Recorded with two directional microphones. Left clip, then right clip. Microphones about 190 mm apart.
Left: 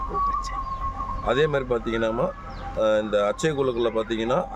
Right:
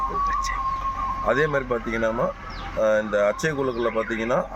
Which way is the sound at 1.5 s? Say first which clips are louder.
Even; 45° left (ahead or behind).